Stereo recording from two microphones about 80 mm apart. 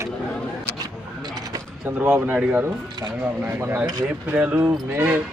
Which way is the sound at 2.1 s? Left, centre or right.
Right.